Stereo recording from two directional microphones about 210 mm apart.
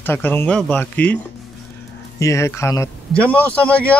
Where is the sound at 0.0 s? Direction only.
10° left (ahead or behind).